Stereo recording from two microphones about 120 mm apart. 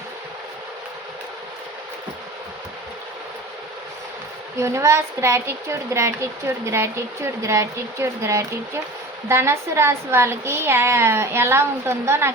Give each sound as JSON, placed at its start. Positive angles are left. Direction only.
{"t": 4.5, "sound": "a woman's voice", "side_deg": -25}